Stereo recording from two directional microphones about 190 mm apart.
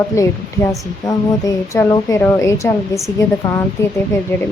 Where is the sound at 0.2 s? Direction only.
15° left (ahead or behind).